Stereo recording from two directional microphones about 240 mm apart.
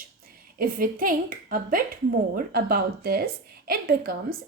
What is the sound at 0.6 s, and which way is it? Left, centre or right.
A woman's voice, right.